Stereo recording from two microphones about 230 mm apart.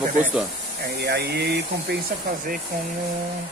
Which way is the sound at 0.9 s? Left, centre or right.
Right.